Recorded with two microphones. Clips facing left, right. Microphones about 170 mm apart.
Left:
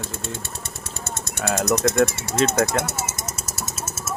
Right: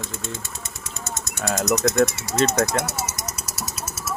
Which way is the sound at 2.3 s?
5° left (ahead or behind).